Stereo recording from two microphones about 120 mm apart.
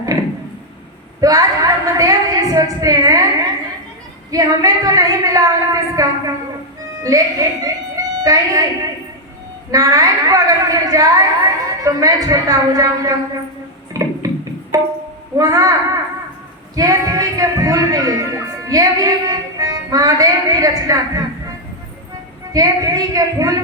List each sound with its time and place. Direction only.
0.0 s a sound: 30° right (ahead or behind)
4.3 s a woman's voice: 30° right (ahead or behind)
9.7 s a woman's voice: 30° right (ahead or behind)
14.0 s guitar: 30° right (ahead or behind)
14.7 s music: 30° right (ahead or behind)
15.4 s a woman's voice: 30° right (ahead or behind)
16.7 s music: 30° right (ahead or behind)
22.5 s a woman's voice: 30° right (ahead or behind)